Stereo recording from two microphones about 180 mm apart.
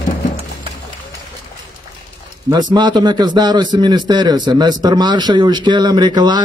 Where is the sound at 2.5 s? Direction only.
25° right (ahead or behind).